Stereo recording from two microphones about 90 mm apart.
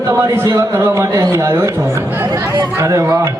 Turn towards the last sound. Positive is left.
turn(degrees=-35)  # may be behind; listen again after turning